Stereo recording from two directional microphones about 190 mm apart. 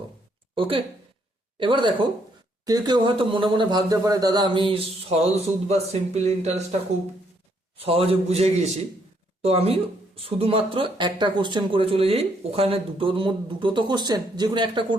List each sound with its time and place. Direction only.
0.5 s speech: 30° right (ahead or behind)
7.8 s a man's voice: 30° right (ahead or behind)